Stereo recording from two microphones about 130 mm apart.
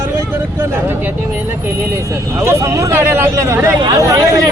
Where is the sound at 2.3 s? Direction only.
20° right (ahead or behind).